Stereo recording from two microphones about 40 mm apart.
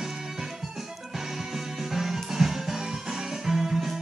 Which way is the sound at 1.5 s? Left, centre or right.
Centre.